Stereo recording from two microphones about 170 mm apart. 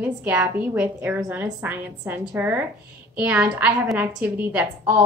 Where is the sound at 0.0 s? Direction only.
10° right (ahead or behind).